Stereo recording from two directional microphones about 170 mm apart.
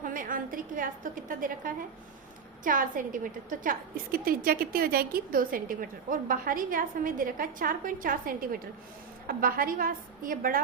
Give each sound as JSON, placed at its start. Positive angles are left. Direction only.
{"t": 0.0, "sound": "a woman's voice", "side_deg": -55}